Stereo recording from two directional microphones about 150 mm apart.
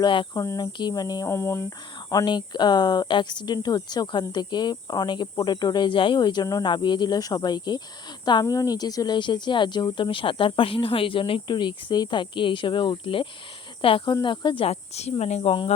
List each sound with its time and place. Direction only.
0.0 s a woman's voice: 30° left (ahead or behind)